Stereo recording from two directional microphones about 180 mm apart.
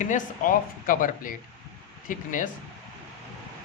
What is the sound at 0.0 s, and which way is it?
Speech, 45° left (ahead or behind).